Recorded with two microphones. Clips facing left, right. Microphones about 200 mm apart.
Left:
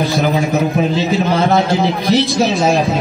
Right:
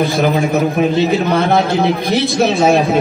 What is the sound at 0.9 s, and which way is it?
A man's voice, 55° right (ahead or behind).